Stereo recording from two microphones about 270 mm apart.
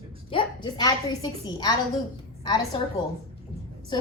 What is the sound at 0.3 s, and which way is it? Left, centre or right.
A woman's voice, centre.